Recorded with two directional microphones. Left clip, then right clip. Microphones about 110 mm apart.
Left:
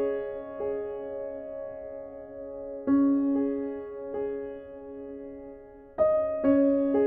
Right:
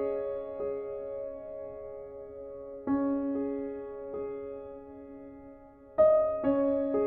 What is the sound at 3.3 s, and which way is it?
Music, 35° left (ahead or behind).